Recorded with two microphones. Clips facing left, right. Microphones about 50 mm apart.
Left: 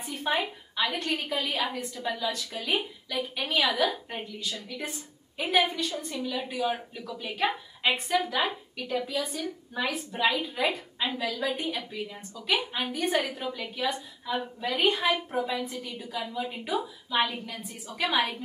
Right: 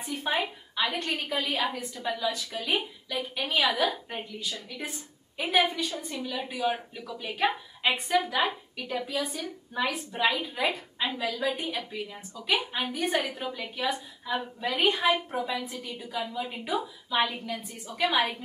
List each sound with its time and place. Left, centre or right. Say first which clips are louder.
0.0 s a woman's voice: even; centre